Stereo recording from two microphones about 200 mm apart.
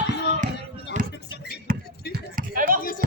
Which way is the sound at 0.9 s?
35° right (ahead or behind).